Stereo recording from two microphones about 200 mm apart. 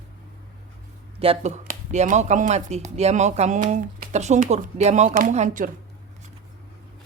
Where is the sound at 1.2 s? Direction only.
30° right (ahead or behind).